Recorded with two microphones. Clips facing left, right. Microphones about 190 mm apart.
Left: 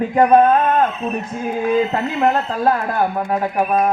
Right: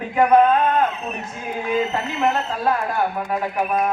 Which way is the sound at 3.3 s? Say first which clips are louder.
Left 4 dB; 40° left (ahead or behind).